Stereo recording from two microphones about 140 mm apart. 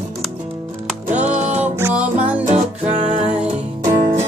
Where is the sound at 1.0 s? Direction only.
55° right (ahead or behind).